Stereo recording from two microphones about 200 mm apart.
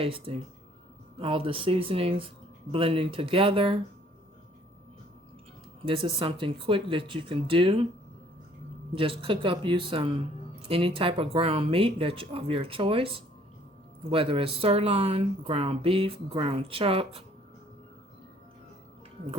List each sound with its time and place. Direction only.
0.0 s speech: 25° right (ahead or behind)
5.8 s speech: 25° right (ahead or behind)
8.9 s speech: 25° right (ahead or behind)